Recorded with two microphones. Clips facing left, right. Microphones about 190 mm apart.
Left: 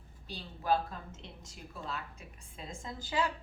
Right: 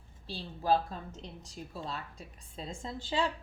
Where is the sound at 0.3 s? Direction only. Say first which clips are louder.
Right 3 dB; 30° right (ahead or behind).